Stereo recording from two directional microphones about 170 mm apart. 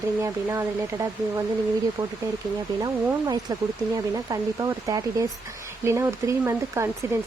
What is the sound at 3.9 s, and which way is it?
Speech, 20° right (ahead or behind).